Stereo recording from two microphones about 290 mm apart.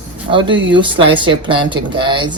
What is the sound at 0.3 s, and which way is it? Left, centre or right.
Speech, centre.